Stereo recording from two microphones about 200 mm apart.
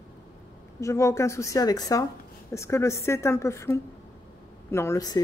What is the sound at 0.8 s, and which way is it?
Speech, 15° left (ahead or behind).